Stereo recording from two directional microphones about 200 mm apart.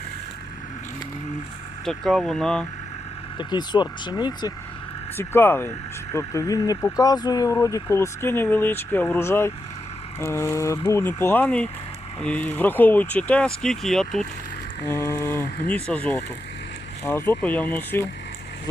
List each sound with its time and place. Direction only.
1.8 s speech: centre (ahead or behind)
3.3 s speech: 20° left (ahead or behind)